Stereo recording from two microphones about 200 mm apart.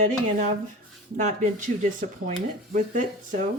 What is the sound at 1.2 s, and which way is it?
A woman's voice, 40° right (ahead or behind).